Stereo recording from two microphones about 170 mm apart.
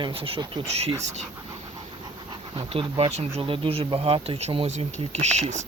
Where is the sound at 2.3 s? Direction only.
30° right (ahead or behind).